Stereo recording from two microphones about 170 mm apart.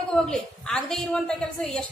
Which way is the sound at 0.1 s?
5° left (ahead or behind).